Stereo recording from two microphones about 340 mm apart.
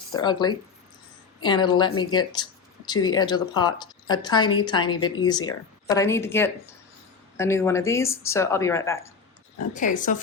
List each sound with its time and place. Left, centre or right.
0.2 s speech: centre
9.7 s speech: left